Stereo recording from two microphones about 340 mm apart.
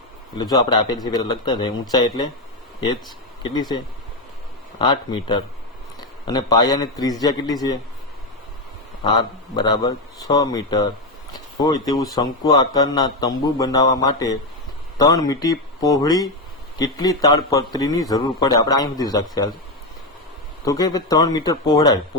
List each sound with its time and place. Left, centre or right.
0.3 s a man's voice: centre
3.4 s a man's voice: centre
4.8 s a man's voice: centre
9.0 s a man's voice: centre
20.7 s a man's voice: centre